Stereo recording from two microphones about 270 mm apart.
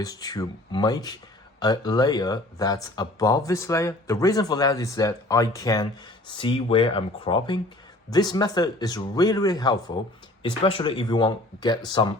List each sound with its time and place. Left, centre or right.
0.0 s speech: centre